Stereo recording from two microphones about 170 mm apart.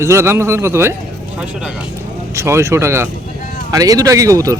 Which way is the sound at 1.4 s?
5° right (ahead or behind).